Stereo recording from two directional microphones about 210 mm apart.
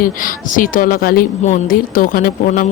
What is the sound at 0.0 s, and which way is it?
Speech, 40° left (ahead or behind).